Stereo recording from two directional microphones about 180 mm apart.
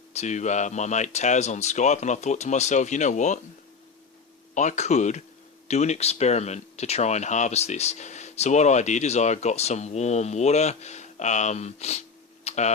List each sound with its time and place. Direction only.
0.1 s speech: 40° left (ahead or behind)
4.5 s speech: 40° left (ahead or behind)
12.5 s tick-tock: 40° left (ahead or behind)